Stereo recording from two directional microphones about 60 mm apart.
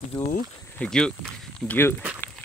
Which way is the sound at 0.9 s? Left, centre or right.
Centre.